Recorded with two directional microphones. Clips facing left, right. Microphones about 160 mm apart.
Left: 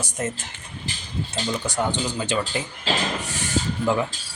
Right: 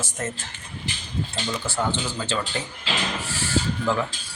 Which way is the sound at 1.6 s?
15° left (ahead or behind).